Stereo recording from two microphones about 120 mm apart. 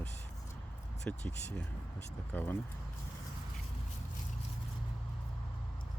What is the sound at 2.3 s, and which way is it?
Speech, 15° left (ahead or behind).